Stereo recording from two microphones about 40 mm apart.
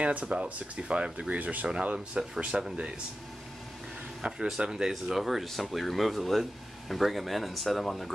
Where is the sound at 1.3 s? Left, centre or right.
Right.